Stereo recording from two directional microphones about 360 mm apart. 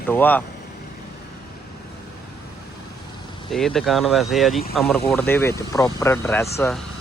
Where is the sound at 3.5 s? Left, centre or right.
Centre.